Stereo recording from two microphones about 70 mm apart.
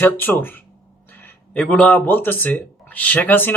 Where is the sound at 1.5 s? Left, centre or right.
Centre.